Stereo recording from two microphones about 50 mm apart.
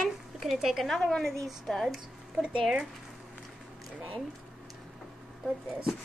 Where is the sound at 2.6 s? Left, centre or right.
Centre.